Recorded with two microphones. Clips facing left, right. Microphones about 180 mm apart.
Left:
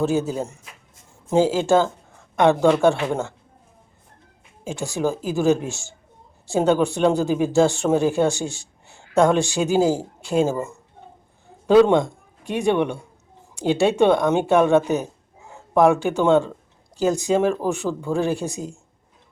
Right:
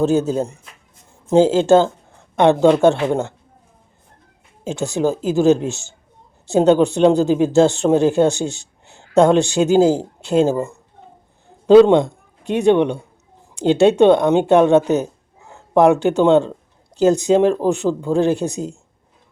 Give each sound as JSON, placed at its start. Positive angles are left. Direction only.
{"t": 0.0, "sound": "speech", "side_deg": -20}
{"t": 4.9, "sound": "a man's voice", "side_deg": -20}